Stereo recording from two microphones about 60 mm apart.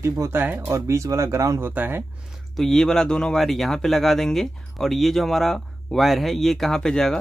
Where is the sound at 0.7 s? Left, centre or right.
Right.